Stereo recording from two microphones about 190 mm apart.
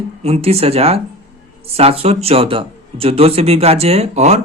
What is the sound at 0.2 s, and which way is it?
Speech, 30° right (ahead or behind).